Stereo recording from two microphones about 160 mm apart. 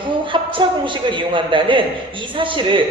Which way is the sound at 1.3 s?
30° right (ahead or behind).